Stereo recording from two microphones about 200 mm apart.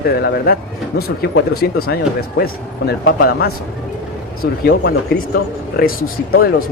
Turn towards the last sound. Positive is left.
turn(degrees=50)  # may be behind; listen again after turning